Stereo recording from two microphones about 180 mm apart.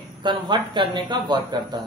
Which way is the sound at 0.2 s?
25° right (ahead or behind).